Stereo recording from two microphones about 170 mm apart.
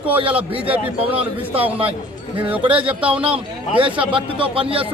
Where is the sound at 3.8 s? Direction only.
30° right (ahead or behind).